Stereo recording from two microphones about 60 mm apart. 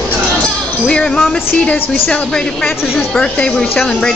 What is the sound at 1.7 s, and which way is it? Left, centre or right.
A woman's voice, left.